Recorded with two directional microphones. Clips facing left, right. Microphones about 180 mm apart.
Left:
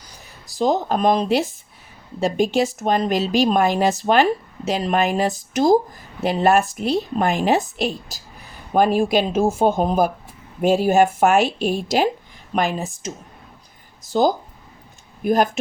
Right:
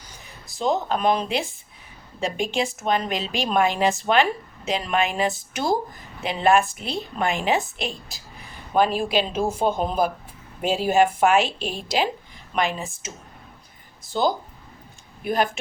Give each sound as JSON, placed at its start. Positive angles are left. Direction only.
{"t": 0.6, "sound": "a woman's voice", "side_deg": 40}